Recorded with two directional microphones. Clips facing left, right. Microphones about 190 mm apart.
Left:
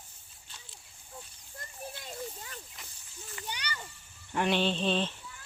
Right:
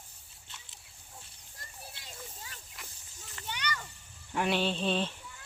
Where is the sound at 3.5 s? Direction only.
35° left (ahead or behind).